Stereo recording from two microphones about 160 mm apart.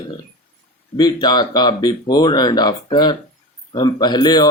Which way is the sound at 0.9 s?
25° left (ahead or behind).